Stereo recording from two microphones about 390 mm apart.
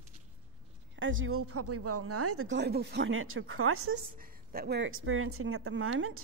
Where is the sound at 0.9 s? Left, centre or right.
Right.